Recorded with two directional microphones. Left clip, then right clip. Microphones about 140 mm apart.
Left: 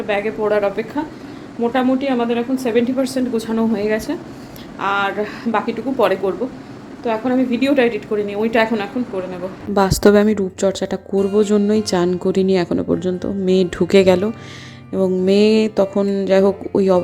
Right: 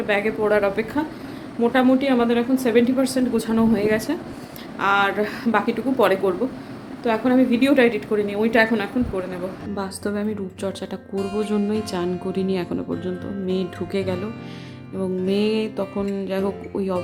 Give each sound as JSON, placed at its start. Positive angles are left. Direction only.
{"t": 0.1, "sound": "a woman's voice", "side_deg": 0}
{"t": 9.7, "sound": "a woman's voice", "side_deg": 55}
{"t": 10.3, "sound": "speech", "side_deg": 30}
{"t": 15.3, "sound": "speech", "side_deg": 40}